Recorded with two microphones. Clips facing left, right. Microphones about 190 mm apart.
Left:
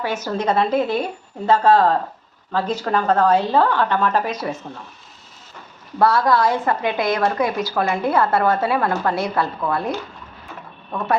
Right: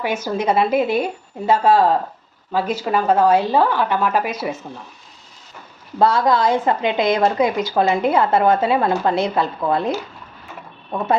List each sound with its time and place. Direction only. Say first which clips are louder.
0.0 s a woman's voice: right 1 dB; 10° right (ahead or behind)
6.0 s a woman's voice: right 1 dB; 20° right (ahead or behind)